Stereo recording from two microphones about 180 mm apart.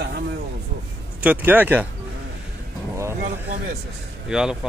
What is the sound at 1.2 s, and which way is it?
Speech, 10° right (ahead or behind).